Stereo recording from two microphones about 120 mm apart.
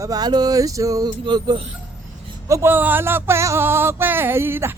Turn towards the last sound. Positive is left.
turn(degrees=-20)  # may be behind; listen again after turning